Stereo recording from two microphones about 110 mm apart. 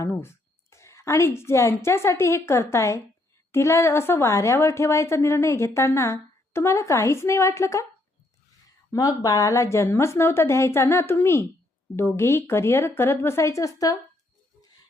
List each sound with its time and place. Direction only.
0.0 s a woman's voice: 25° left (ahead or behind)
8.9 s a woman's voice: 35° left (ahead or behind)